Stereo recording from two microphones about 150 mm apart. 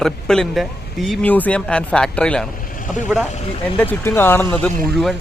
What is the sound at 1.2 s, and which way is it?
Speech, 10° left (ahead or behind).